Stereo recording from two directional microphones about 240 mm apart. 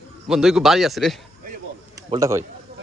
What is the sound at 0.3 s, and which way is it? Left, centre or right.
Speech, centre.